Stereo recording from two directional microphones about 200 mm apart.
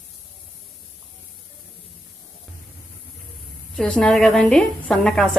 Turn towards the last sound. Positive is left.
turn(degrees=0)  # may be behind; listen again after turning